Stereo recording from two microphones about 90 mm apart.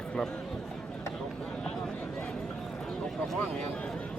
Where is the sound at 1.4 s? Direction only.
10° left (ahead or behind).